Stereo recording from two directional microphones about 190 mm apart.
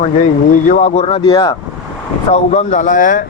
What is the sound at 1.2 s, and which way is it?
Speech, 25° left (ahead or behind).